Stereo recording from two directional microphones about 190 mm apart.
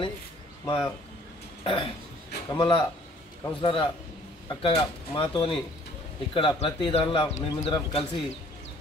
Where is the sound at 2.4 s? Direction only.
25° left (ahead or behind).